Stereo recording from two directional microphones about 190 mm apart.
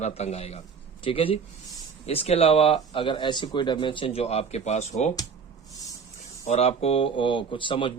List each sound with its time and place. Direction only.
0.0 s speech: 35° left (ahead or behind)
6.5 s speech: 35° left (ahead or behind)